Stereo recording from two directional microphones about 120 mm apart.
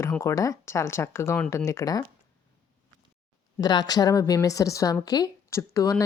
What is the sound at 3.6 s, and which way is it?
A woman's voice, 35° left (ahead or behind).